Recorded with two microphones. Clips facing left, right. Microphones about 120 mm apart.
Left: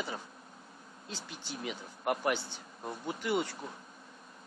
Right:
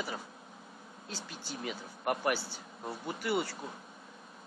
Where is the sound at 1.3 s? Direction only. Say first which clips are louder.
Even; 20° left (ahead or behind).